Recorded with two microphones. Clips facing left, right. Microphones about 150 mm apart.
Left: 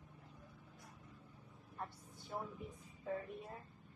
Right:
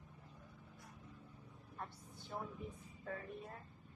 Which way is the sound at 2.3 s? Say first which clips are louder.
Left 1 dB; 15° left (ahead or behind).